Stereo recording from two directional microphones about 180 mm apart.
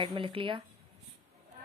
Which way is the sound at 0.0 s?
30° right (ahead or behind).